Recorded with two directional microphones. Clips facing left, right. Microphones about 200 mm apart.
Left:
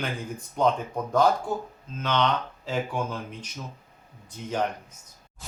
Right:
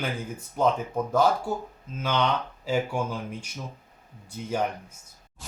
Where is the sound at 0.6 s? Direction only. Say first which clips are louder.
Even; 5° right (ahead or behind).